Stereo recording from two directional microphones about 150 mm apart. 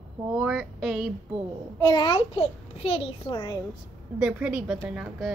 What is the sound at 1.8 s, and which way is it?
A child's voice, 30° left (ahead or behind).